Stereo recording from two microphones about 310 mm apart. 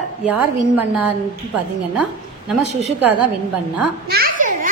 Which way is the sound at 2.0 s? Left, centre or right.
Centre.